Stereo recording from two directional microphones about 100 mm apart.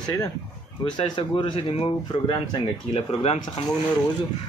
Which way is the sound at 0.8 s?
55° left (ahead or behind).